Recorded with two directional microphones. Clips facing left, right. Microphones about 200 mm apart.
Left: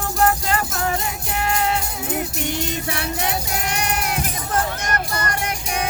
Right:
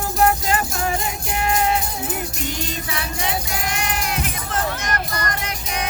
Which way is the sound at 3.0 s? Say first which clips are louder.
Even; 60° left (ahead or behind).